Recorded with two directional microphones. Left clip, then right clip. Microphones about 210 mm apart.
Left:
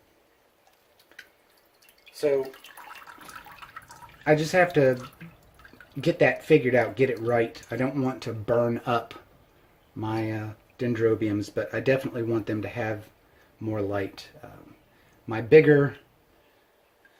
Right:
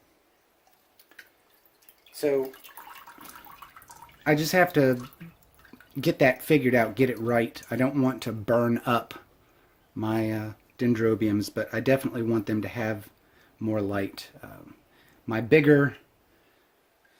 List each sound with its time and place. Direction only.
4.2 s speech: 50° right (ahead or behind)
6.0 s speech: 50° right (ahead or behind)